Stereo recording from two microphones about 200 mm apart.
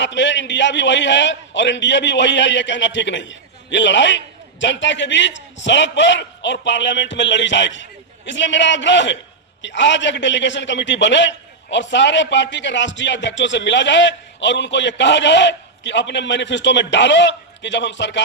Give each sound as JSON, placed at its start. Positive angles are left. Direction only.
{"t": 0.0, "sound": "a man's voice", "side_deg": 65}